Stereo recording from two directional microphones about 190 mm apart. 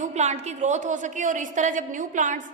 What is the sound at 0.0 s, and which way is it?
A woman's voice, 35° right (ahead or behind).